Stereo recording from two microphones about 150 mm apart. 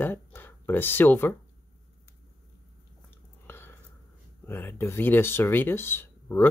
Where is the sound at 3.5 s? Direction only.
15° left (ahead or behind).